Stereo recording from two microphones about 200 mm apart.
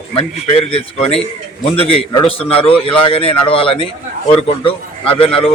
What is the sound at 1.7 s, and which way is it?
A man's voice, 30° left (ahead or behind).